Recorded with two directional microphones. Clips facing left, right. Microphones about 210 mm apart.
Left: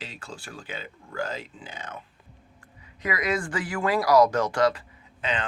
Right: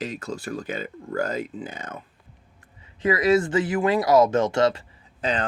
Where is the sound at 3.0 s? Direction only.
30° right (ahead or behind).